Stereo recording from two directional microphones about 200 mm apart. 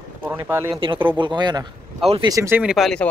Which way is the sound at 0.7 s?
25° right (ahead or behind).